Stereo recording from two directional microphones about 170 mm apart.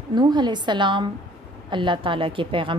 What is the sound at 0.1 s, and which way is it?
A woman's voice, 25° right (ahead or behind).